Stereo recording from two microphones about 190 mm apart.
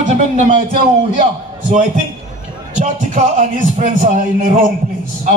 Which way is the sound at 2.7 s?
40° right (ahead or behind).